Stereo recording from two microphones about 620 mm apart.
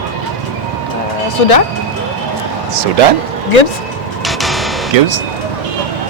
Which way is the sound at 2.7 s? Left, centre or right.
Right.